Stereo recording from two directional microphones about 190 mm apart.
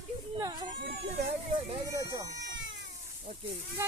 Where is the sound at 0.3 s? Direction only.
20° right (ahead or behind).